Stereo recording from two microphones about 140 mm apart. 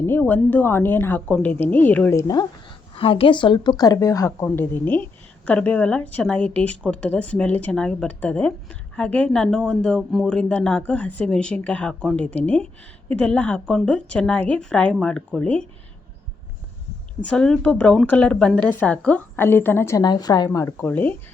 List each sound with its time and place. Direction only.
0.0 s speech: 15° left (ahead or behind)
2.1 s speech: 25° left (ahead or behind)
2.9 s a woman's voice: 40° left (ahead or behind); by 15.6 s 5° left (ahead or behind)
17.2 s speech: 5° left (ahead or behind)
20.1 s speech: 30° left (ahead or behind); by 21.2 s 15° left (ahead or behind)